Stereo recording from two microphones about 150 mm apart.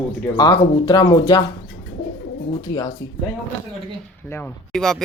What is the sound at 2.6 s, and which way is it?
Speech, 25° left (ahead or behind).